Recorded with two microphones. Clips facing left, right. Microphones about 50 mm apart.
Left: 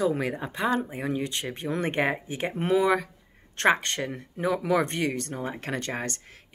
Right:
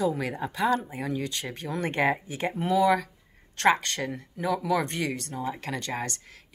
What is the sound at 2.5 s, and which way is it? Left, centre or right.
Speech, left.